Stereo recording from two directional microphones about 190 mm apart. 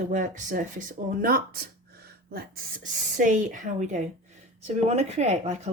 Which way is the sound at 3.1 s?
40° right (ahead or behind).